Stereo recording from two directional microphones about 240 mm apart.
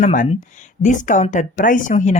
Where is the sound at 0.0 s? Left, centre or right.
Left.